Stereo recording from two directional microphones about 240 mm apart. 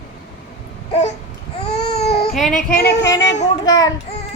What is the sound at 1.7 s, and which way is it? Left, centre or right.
Baby cry, left.